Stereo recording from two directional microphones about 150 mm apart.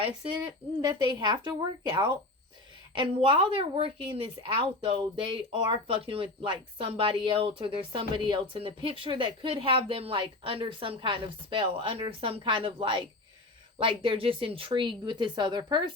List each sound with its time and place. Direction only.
0.0 s a woman's voice: 35° right (ahead or behind)